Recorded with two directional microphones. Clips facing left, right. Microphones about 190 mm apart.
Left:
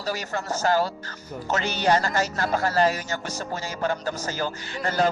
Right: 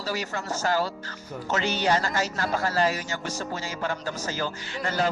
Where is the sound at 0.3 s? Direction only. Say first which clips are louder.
Left 4 dB; 40° left (ahead or behind).